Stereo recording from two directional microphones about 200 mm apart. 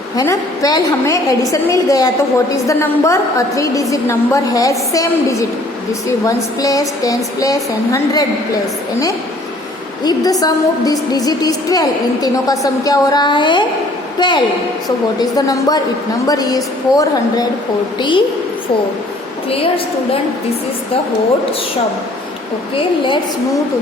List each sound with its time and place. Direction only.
0.2 s a woman's voice: 15° left (ahead or behind)
10.0 s a woman's voice: 20° left (ahead or behind)
19.5 s a woman's voice: 30° left (ahead or behind)
22.7 s a woman's voice: 25° left (ahead or behind)